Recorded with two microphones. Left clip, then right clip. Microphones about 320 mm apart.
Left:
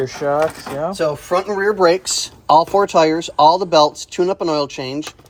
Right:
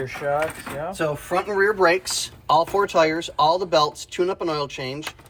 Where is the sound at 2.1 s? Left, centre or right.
Left.